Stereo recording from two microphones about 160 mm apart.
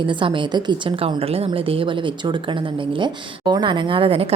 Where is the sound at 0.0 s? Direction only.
30° right (ahead or behind).